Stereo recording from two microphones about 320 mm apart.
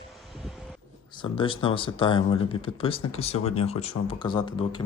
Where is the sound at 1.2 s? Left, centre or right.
Centre.